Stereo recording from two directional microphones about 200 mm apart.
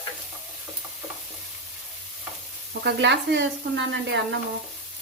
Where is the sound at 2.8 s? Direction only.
60° right (ahead or behind).